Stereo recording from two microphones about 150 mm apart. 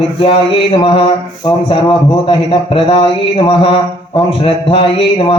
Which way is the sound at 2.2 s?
35° left (ahead or behind).